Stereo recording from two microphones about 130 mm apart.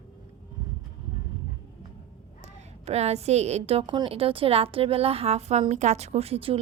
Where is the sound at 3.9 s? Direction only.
40° right (ahead or behind).